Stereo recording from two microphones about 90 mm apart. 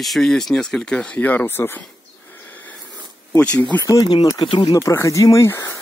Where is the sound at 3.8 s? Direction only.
50° left (ahead or behind).